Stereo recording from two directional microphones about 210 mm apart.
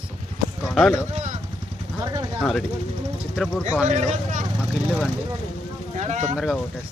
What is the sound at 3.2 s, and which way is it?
Speech, centre (ahead or behind).